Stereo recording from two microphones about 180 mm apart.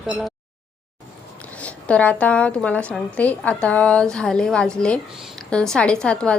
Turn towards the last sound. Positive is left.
turn(degrees=5)  # may be behind; listen again after turning